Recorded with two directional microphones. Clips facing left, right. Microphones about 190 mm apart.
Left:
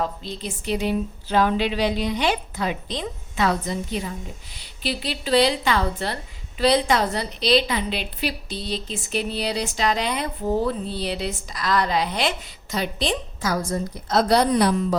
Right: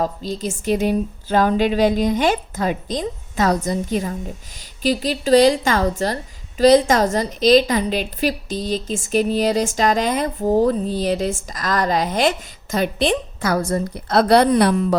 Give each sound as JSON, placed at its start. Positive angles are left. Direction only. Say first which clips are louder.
{"t": 0.0, "sound": "a woman's voice", "louder": "right 5 dB", "side_deg": -40}